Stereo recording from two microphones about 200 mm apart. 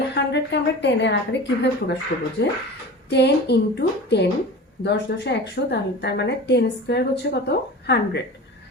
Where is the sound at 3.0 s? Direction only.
55° left (ahead or behind).